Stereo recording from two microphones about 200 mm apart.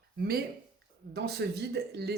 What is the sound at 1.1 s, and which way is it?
A woman's voice, 55° right (ahead or behind).